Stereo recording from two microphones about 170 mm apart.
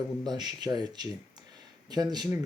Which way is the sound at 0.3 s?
25° right (ahead or behind).